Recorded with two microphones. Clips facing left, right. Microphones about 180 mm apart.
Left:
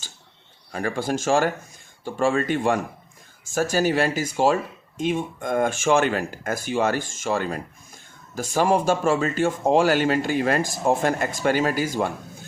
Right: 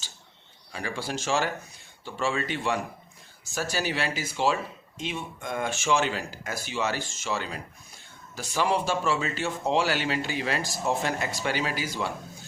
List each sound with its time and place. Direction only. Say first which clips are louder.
0.7 s speech: left 8 dB; 50° left (ahead or behind)